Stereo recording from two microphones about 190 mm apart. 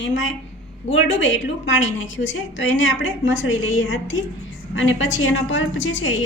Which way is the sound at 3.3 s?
90° left.